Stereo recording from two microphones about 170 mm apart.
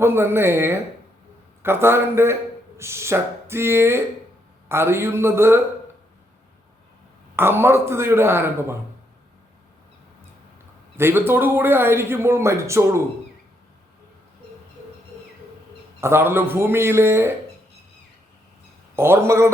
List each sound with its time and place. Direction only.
0.0 s speech: 15° right (ahead or behind)
7.3 s speech: 15° right (ahead or behind)
10.9 s speech: 15° right (ahead or behind)
16.0 s speech: 15° right (ahead or behind)
18.9 s speech: 15° right (ahead or behind)